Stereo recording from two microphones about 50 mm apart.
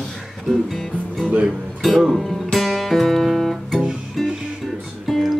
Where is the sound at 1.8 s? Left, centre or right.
Centre.